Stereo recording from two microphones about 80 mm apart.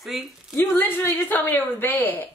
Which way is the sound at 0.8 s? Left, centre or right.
Left.